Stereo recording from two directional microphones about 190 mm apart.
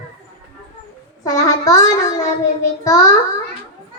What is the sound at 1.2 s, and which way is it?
A child's voice, 20° left (ahead or behind).